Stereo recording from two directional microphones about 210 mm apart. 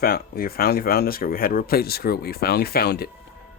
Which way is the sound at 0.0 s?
45° left (ahead or behind).